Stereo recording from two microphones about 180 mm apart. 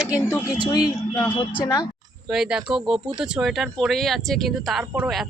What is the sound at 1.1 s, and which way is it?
Speech, 20° left (ahead or behind).